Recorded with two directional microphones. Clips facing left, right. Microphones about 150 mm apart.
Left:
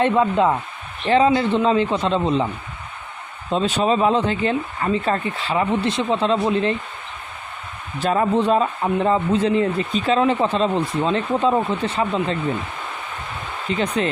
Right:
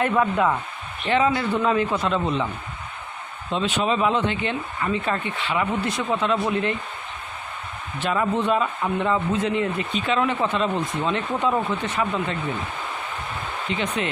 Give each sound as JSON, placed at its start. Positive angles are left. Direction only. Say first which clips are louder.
{"t": 0.0, "sound": "a man's voice", "louder": "left 3 dB", "side_deg": 25}
{"t": 3.5, "sound": "speech", "louder": "left 4 dB", "side_deg": 35}
{"t": 8.0, "sound": "speech", "louder": "left 4 dB", "side_deg": 35}
{"t": 13.7, "sound": "speech", "louder": "left 5 dB", "side_deg": 35}